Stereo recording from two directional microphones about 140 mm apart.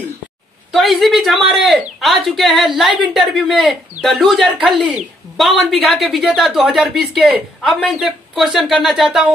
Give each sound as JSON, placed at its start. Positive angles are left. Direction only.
{"t": 0.7, "sound": "speech", "side_deg": 0}